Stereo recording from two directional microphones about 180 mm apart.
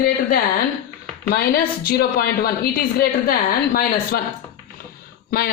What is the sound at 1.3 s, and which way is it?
A woman's voice, 60° left (ahead or behind).